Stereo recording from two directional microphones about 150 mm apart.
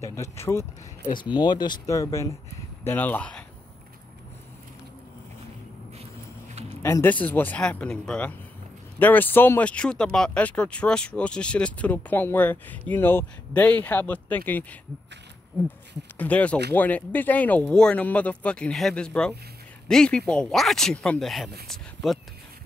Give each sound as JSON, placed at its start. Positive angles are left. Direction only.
{"t": 0.0, "sound": "speech", "side_deg": 20}
{"t": 1.1, "sound": "speech", "side_deg": 30}
{"t": 6.8, "sound": "speech", "side_deg": 15}
{"t": 16.2, "sound": "speech", "side_deg": 10}